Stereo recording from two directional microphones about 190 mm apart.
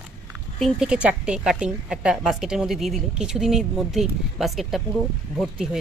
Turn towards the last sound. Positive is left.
turn(degrees=0)  # may be behind; listen again after turning